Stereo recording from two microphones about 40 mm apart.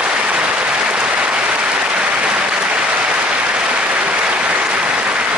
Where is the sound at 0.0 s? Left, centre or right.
Right.